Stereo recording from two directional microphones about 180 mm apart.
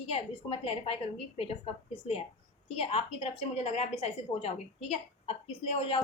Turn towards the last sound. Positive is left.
turn(degrees=35)  # may be behind; listen again after turning